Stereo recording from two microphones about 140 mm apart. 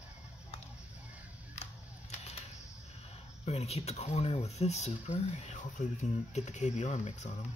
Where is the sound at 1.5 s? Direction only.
50° left (ahead or behind).